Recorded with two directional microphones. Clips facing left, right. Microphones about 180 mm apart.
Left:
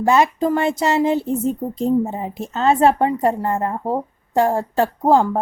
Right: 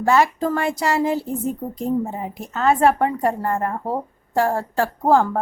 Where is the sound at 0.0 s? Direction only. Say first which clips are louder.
Left 2 dB; 20° left (ahead or behind).